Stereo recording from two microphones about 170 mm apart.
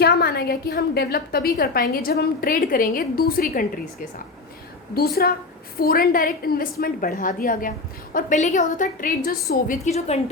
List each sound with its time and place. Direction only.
0.0 s a woman's voice: 65° left (ahead or behind)
4.9 s a woman's voice: 65° left (ahead or behind)
9.8 s a woman's voice: 40° left (ahead or behind)